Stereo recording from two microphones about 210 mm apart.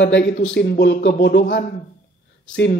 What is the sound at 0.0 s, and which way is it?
A man's voice, 55° left (ahead or behind).